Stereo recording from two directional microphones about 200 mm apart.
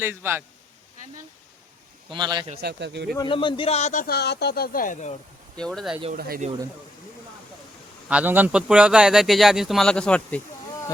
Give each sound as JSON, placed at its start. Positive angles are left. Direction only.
{"t": 0.0, "sound": "a man's voice", "side_deg": -10}
{"t": 2.0, "sound": "a man's voice", "side_deg": -20}
{"t": 2.6, "sound": "speech", "side_deg": -55}
{"t": 3.2, "sound": "a man's voice", "side_deg": 25}
{"t": 5.5, "sound": "speech", "side_deg": 5}
{"t": 6.1, "sound": "speech", "side_deg": -45}
{"t": 8.0, "sound": "speech", "side_deg": -5}